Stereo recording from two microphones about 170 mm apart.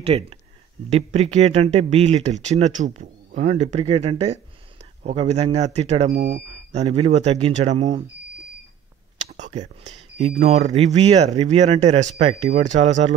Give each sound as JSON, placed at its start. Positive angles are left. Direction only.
{"t": 0.0, "sound": "speech", "side_deg": -35}
{"t": 9.3, "sound": "a sound", "side_deg": -40}
{"t": 10.1, "sound": "speech", "side_deg": -35}